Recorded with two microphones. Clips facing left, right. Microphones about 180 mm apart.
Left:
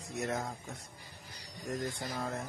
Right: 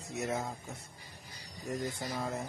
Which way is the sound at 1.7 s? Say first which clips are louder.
Right 1 dB; 10° right (ahead or behind).